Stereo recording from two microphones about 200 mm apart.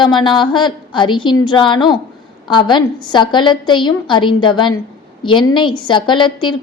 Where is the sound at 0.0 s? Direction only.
20° left (ahead or behind).